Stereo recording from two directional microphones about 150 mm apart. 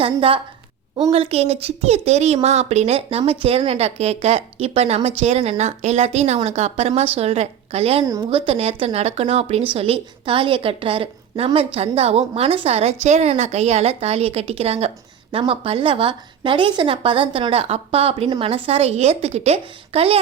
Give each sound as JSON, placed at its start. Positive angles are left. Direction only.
{"t": 0.0, "sound": "a woman's voice", "side_deg": -40}